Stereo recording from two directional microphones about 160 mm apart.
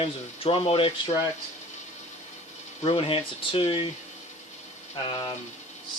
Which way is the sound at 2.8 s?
35° left (ahead or behind).